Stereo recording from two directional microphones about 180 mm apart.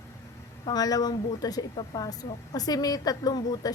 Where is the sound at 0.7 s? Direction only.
20° left (ahead or behind).